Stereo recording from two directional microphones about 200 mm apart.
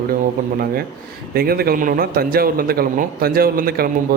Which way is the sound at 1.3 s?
50° right (ahead or behind).